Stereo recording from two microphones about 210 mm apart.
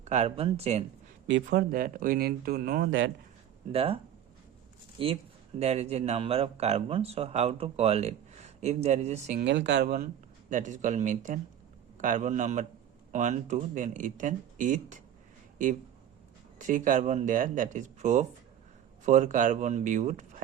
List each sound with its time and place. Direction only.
0.0 s speech: 30° right (ahead or behind)
1.5 s speech: 45° right (ahead or behind)
3.7 s speech: 25° right (ahead or behind)
9.4 s speech: 55° right (ahead or behind); by 15.0 s 35° right (ahead or behind)
16.6 s speech: 35° right (ahead or behind)